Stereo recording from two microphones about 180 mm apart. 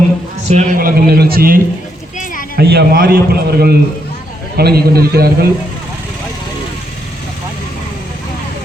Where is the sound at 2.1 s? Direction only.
45° left (ahead or behind).